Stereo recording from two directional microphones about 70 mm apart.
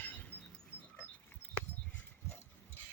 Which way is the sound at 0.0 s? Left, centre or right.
Left.